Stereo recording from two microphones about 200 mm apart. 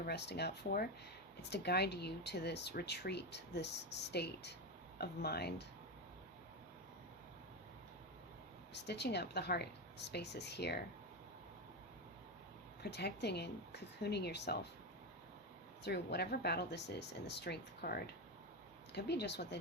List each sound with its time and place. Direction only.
0.0 s speech: 55° left (ahead or behind)
8.7 s speech: 55° left (ahead or behind)
12.8 s speech: 55° left (ahead or behind)
15.8 s speech: 55° left (ahead or behind)